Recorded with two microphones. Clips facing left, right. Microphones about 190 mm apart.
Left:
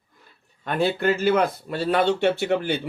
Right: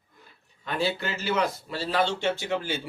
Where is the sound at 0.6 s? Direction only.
55° left (ahead or behind).